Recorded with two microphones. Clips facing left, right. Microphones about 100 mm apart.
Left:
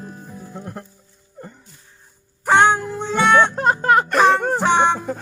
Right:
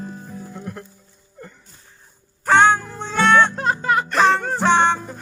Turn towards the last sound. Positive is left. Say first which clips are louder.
# even
turn(degrees=10)  # may be behind; listen again after turning